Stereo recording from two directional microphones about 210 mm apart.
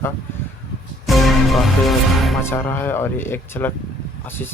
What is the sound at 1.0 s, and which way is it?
Music, centre (ahead or behind).